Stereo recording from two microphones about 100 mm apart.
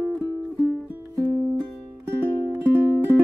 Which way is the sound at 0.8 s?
20° right (ahead or behind).